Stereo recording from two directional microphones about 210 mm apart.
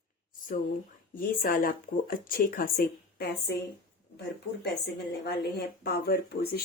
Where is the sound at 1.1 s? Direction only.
40° left (ahead or behind).